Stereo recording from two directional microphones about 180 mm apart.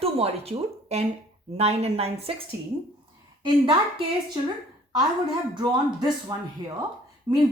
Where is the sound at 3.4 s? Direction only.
25° right (ahead or behind).